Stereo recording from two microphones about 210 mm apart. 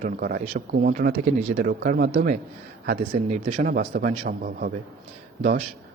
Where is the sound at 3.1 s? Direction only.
30° right (ahead or behind).